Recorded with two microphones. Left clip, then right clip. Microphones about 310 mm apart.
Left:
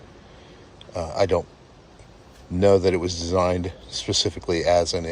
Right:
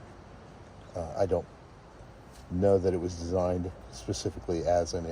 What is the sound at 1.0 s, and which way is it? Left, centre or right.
Speech, left.